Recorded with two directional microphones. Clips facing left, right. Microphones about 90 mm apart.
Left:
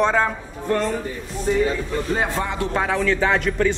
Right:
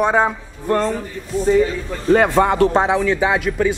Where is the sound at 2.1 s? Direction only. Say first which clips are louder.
Right 13 dB; 70° right (ahead or behind).